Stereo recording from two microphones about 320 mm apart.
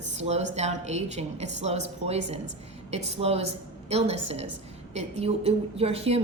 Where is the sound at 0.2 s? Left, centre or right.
Right.